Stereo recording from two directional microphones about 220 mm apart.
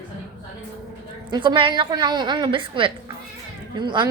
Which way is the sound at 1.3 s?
20° right (ahead or behind).